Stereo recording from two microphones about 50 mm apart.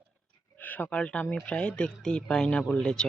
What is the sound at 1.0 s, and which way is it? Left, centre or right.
Speech, left.